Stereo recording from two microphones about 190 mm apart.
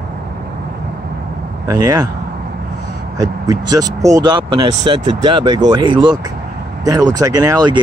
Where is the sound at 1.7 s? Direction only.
20° right (ahead or behind).